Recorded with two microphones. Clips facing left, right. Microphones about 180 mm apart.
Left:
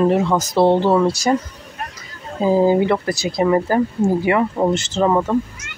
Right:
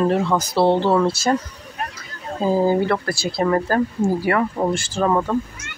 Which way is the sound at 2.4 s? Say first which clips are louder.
Left 3 dB; 15° left (ahead or behind).